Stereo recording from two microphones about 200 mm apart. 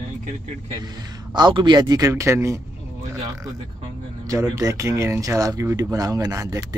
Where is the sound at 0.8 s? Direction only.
20° right (ahead or behind).